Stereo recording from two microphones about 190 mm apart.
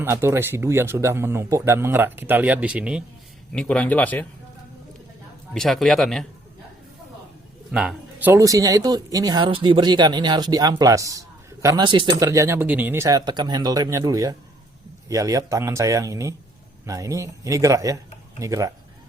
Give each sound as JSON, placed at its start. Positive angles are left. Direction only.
{"t": 0.0, "sound": "speech", "side_deg": -10}
{"t": 3.5, "sound": "speech", "side_deg": 5}
{"t": 5.5, "sound": "speech", "side_deg": 0}
{"t": 7.7, "sound": "speech", "side_deg": -5}